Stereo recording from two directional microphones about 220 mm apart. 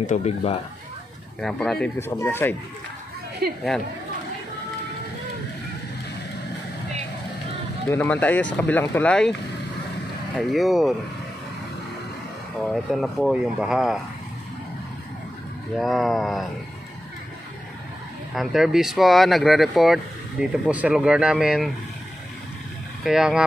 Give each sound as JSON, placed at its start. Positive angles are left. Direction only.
{"t": 0.0, "sound": "speech", "side_deg": 30}
{"t": 1.4, "sound": "speech", "side_deg": 5}
{"t": 7.9, "sound": "speech", "side_deg": 10}
{"t": 10.3, "sound": "speech", "side_deg": 0}
{"t": 12.6, "sound": "speech", "side_deg": 0}
{"t": 15.8, "sound": "speech", "side_deg": 0}
{"t": 18.3, "sound": "speech", "side_deg": 0}
{"t": 23.0, "sound": "speech", "side_deg": -5}